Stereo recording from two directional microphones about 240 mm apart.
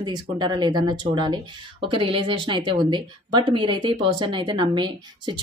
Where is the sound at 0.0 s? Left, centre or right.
Centre.